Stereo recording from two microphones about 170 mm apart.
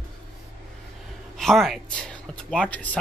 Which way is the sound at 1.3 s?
Centre (ahead or behind).